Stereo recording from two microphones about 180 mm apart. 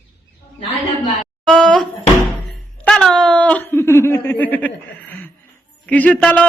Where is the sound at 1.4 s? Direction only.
5° left (ahead or behind).